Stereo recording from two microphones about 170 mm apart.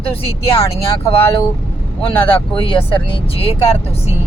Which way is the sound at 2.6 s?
30° left (ahead or behind).